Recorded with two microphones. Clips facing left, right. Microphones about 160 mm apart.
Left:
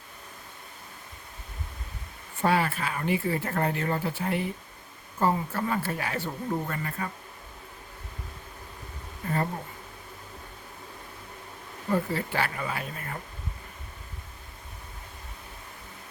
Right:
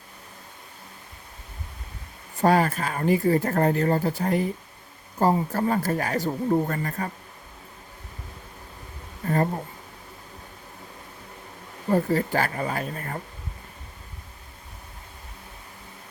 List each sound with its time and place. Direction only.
2.4 s speech: 40° right (ahead or behind)
11.9 s speech: 40° right (ahead or behind)